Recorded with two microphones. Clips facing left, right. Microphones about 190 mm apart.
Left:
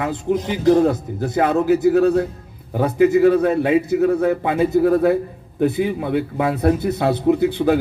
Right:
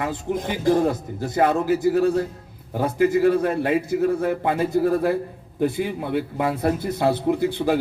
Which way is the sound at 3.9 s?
60° left (ahead or behind).